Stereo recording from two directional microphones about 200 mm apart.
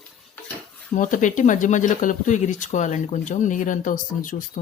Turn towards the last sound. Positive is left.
turn(degrees=45)  # may be behind; listen again after turning